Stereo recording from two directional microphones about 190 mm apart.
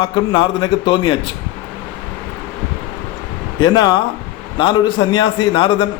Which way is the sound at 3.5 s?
20° left (ahead or behind).